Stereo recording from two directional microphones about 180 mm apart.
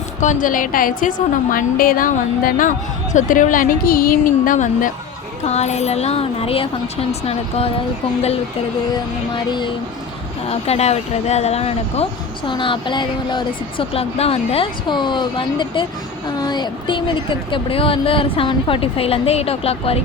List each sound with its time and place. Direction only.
0.2 s a woman's voice: 45° left (ahead or behind)
9.3 s speech: 25° left (ahead or behind)
10.5 s speech: 35° left (ahead or behind)